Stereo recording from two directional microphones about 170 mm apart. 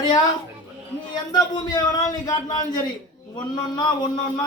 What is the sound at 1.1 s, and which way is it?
A man's voice, 25° left (ahead or behind).